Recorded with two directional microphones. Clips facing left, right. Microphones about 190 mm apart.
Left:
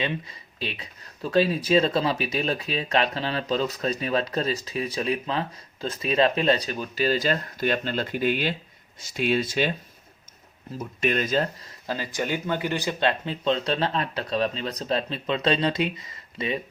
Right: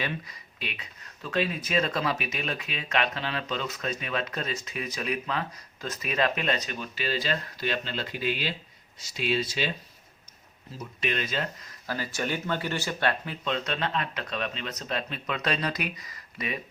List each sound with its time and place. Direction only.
0.0 s speech: 25° left (ahead or behind); by 9.7 s 50° left (ahead or behind)
10.8 s speech: 45° left (ahead or behind)
11.9 s speech: 15° left (ahead or behind)